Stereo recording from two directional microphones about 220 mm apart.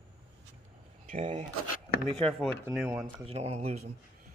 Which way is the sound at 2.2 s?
5° left (ahead or behind).